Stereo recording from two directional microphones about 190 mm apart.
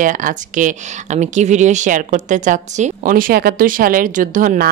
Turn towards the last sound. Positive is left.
turn(degrees=-45)  # may be behind; listen again after turning